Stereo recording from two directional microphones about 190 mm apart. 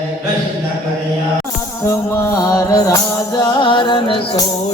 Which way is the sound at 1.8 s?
15° left (ahead or behind).